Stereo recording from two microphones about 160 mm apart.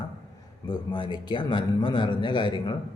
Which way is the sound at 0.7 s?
30° left (ahead or behind).